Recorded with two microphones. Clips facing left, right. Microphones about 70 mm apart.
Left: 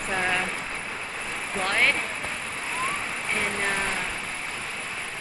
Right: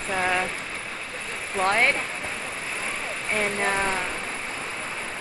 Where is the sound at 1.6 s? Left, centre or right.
Right.